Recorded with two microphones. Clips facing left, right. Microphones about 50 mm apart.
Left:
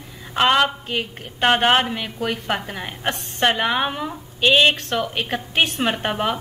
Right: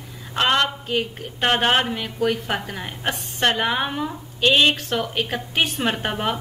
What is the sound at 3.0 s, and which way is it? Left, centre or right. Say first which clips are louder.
A woman's voice: left 1 dB; centre.